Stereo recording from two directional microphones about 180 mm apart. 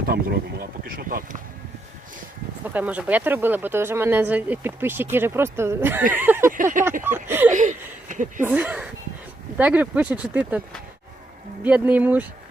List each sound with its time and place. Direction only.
0.1 s speech: 55° right (ahead or behind)
2.6 s speech: 10° right (ahead or behind)
6.5 s speech: 45° right (ahead or behind)
7.0 s speech: 10° right (ahead or behind)
7.5 s a sound: 45° right (ahead or behind)
8.4 s speech: 10° right (ahead or behind)
11.6 s speech: 10° right (ahead or behind)